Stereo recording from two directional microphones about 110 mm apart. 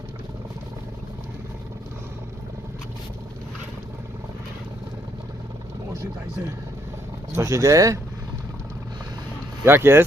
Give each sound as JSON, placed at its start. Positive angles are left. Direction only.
{"t": 7.3, "sound": "speech", "side_deg": -25}
{"t": 9.6, "sound": "speech", "side_deg": -20}